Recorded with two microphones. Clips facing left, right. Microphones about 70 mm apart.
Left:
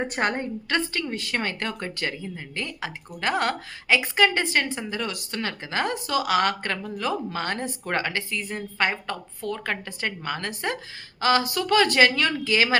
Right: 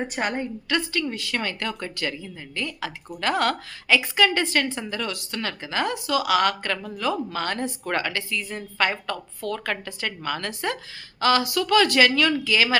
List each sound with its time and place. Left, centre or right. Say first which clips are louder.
0.1 s a woman's voice: left 1 dB; left